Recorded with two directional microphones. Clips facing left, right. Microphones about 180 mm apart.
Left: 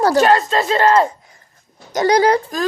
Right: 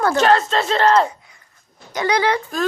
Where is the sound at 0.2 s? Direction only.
5° left (ahead or behind).